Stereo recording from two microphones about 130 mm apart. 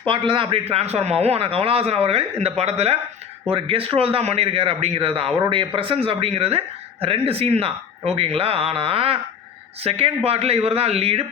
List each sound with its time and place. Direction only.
0.0 s speech: 40° right (ahead or behind)
10.2 s speech: 50° right (ahead or behind)